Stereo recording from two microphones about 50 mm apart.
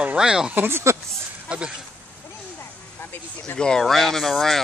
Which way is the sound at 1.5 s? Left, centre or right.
Right.